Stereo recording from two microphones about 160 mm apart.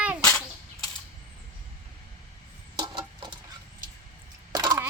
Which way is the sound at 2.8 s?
30° right (ahead or behind).